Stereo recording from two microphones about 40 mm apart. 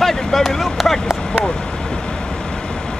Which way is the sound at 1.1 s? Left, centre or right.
Centre.